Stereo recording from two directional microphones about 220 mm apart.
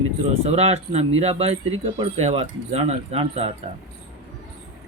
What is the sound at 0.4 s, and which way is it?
Speech, 30° right (ahead or behind).